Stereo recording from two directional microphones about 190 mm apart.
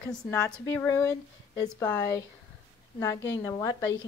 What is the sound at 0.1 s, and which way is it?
A woman's voice, 10° left (ahead or behind).